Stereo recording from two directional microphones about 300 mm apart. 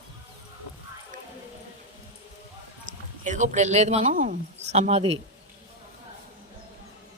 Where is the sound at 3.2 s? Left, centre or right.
Right.